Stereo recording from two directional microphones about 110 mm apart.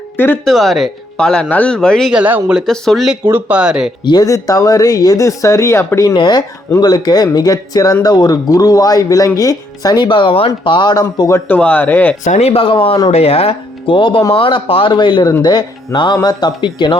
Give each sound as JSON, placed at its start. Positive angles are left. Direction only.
{"t": 0.4, "sound": "speech", "side_deg": 0}
{"t": 2.1, "sound": "speech", "side_deg": -10}
{"t": 3.2, "sound": "speech", "side_deg": -15}
{"t": 4.0, "sound": "speech", "side_deg": 35}
{"t": 6.1, "sound": "speech", "side_deg": 40}
{"t": 11.3, "sound": "speech", "side_deg": 25}
{"t": 11.5, "sound": "speech", "side_deg": 15}
{"t": 12.3, "sound": "speech", "side_deg": 70}
{"t": 13.1, "sound": "speech", "side_deg": 65}